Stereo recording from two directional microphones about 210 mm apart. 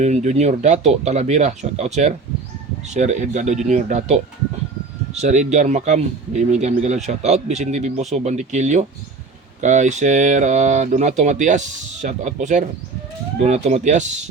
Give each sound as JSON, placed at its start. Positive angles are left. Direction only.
{"t": 0.0, "sound": "speech", "side_deg": -35}
{"t": 5.2, "sound": "speech", "side_deg": -35}